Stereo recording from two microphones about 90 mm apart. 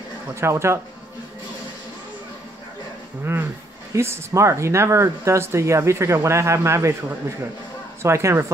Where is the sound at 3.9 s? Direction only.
30° right (ahead or behind).